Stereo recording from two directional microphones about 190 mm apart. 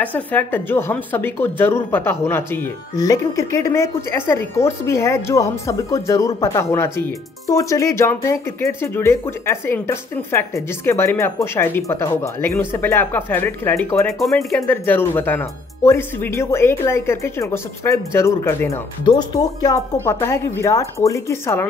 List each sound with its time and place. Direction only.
0.0 s a woman's voice: 10° left (ahead or behind)